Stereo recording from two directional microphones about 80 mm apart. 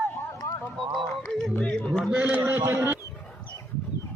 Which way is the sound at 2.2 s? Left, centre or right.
Centre.